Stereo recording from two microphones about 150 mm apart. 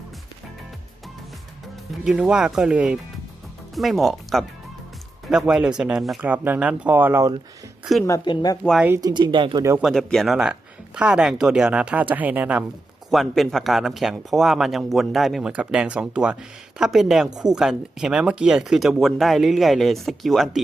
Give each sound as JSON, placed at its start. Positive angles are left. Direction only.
{"t": 2.0, "sound": "speech", "side_deg": -5}
{"t": 8.0, "sound": "speech", "side_deg": 25}
{"t": 9.0, "sound": "speech", "side_deg": -25}
{"t": 9.8, "sound": "speech", "side_deg": 5}
{"t": 13.1, "sound": "speech", "side_deg": 0}